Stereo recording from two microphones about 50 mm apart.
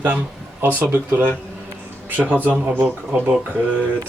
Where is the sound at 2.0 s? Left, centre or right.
Right.